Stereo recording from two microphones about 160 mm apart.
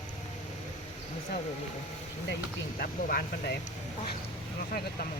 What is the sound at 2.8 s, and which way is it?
Speech, 70° left (ahead or behind).